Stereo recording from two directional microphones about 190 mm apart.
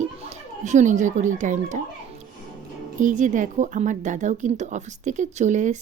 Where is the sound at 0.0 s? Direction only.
40° right (ahead or behind).